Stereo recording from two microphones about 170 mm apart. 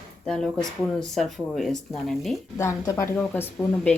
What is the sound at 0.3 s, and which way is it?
Speech, 5° left (ahead or behind).